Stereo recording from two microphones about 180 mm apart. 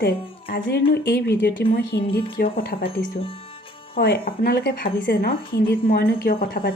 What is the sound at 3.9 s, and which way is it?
Speech, 55° left (ahead or behind).